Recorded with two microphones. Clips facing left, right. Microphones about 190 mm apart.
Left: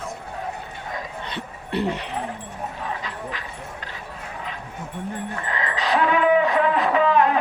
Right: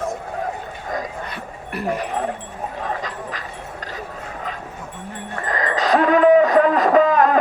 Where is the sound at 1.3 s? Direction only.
25° left (ahead or behind).